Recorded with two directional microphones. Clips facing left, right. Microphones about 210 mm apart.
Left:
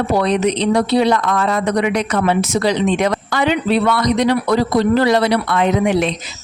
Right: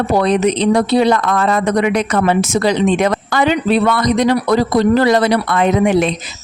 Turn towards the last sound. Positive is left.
turn(degrees=-50)  # may be behind; listen again after turning